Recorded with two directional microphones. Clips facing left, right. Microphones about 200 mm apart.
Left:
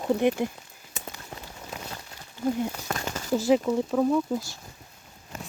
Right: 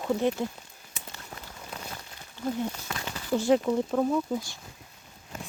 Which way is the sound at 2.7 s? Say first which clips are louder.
Left 4 dB; 45° left (ahead or behind).